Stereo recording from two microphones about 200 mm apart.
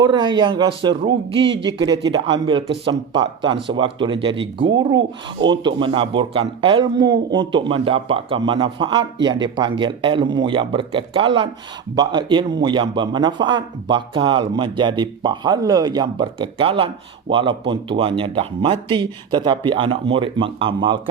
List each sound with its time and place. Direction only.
0.0 s a man's voice: 20° right (ahead or behind)